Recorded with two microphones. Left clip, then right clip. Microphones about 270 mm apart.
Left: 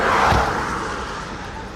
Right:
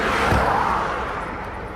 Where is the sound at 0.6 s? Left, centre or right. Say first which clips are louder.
Right 3 dB; centre.